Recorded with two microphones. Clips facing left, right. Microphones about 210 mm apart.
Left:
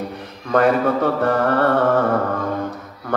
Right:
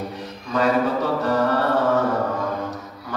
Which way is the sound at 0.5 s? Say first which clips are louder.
Left 4 dB; 55° left (ahead or behind).